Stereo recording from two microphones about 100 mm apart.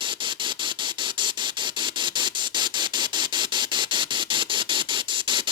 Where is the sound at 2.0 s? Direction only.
50° right (ahead or behind).